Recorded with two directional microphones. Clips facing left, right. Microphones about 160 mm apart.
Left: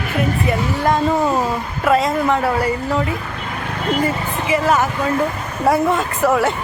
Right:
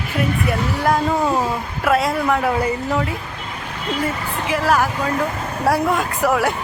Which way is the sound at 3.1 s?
60° left (ahead or behind).